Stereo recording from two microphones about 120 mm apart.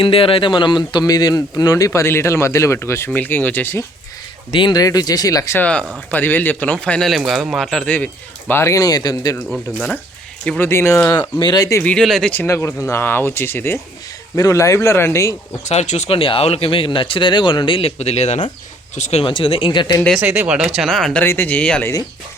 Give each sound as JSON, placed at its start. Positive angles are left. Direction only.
{"t": 0.0, "sound": "speech", "side_deg": 50}
{"t": 4.5, "sound": "speech", "side_deg": 35}
{"t": 5.5, "sound": "speech", "side_deg": 10}
{"t": 7.9, "sound": "speech", "side_deg": 15}
{"t": 10.6, "sound": "speech", "side_deg": 20}
{"t": 11.1, "sound": "speech", "side_deg": 35}
{"t": 11.8, "sound": "speech", "side_deg": 10}
{"t": 12.3, "sound": "speech", "side_deg": 15}
{"t": 15.6, "sound": "speech", "side_deg": 70}
{"t": 18.9, "sound": "speech", "side_deg": 75}
{"t": 19.2, "sound": "speech", "side_deg": 45}
{"t": 20.1, "sound": "speech", "side_deg": -10}